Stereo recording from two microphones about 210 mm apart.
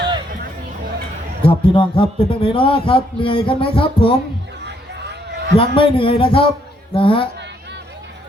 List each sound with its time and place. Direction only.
1.4 s a man's voice: 25° left (ahead or behind)
4.6 s a sound: 55° right (ahead or behind)
5.5 s a man's voice: 25° left (ahead or behind)